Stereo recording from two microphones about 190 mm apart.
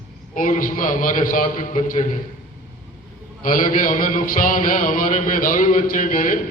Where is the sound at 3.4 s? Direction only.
45° left (ahead or behind).